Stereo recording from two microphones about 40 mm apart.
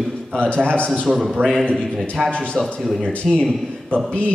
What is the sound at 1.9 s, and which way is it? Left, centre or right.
A man's voice, centre.